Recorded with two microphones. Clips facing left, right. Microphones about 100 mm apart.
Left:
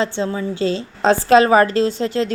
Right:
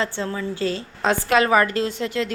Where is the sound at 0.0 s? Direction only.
20° left (ahead or behind).